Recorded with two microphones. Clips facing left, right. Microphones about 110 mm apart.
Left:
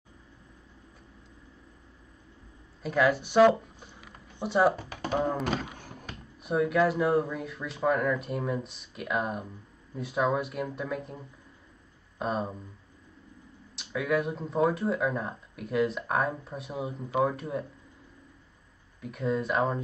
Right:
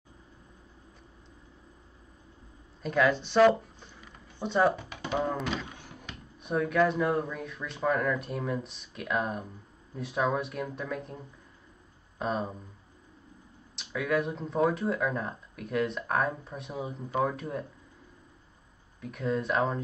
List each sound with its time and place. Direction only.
2.8 s speech: 5° left (ahead or behind)
4.0 s a sound: 10° left (ahead or behind)
5.4 s a sound: 45° left (ahead or behind)
6.4 s speech: 5° left (ahead or behind)
13.7 s speech: centre (ahead or behind)
18.9 s speech: centre (ahead or behind)